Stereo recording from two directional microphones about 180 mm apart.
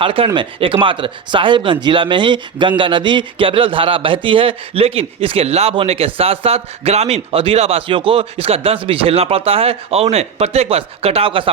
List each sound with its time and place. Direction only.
0.0 s a man's voice: 30° right (ahead or behind)